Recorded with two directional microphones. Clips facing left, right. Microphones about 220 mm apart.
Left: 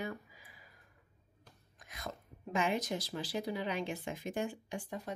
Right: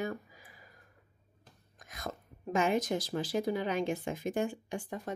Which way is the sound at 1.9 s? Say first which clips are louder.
Right 3 dB; 45° right (ahead or behind).